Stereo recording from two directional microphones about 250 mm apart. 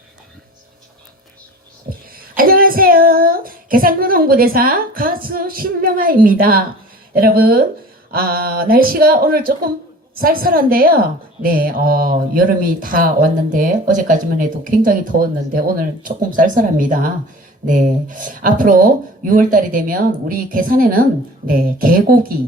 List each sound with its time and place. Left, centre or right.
1.9 s child singing: right
7.1 s speech: right